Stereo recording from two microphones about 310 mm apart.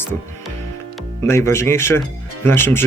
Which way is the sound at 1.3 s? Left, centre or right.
Centre.